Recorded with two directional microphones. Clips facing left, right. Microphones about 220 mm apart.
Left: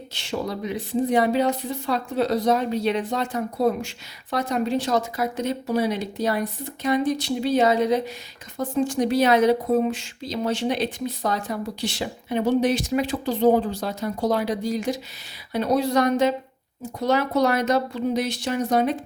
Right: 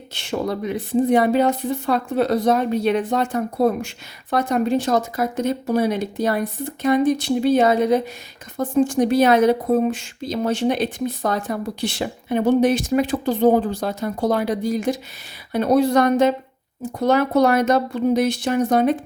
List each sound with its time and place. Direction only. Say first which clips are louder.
0.1 s speech: right 4 dB; 55° right (ahead or behind)